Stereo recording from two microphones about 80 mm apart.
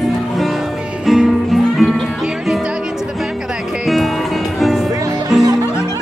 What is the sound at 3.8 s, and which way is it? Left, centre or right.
Music, centre.